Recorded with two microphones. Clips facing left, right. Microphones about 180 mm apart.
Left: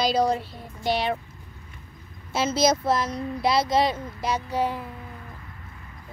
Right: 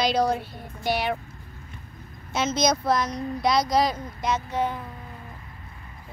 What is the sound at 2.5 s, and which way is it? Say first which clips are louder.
Speech: left 1 dB; 5° left (ahead or behind).